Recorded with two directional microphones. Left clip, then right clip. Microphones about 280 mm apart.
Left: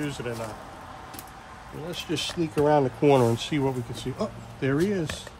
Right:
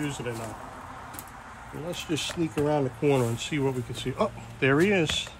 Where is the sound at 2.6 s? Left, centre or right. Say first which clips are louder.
Left 5 dB; left.